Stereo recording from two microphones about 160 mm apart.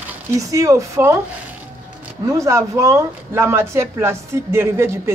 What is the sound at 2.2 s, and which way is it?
Speech, 20° right (ahead or behind).